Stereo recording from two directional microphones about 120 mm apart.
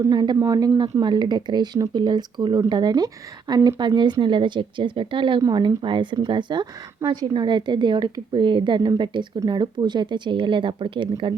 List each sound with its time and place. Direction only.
0.0 s speech: 35° right (ahead or behind)